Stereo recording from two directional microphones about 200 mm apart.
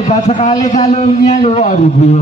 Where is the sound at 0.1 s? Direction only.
35° left (ahead or behind).